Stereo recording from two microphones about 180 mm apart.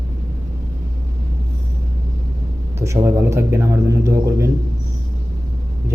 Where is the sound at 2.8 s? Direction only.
15° right (ahead or behind).